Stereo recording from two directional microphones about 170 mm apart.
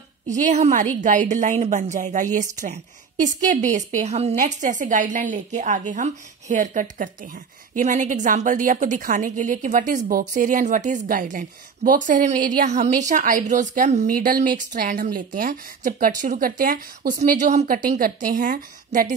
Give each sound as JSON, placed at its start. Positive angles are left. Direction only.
{"t": 0.3, "sound": "a woman's voice", "side_deg": -45}
{"t": 14.1, "sound": "a woman's voice", "side_deg": -55}
{"t": 17.8, "sound": "a woman's voice", "side_deg": -55}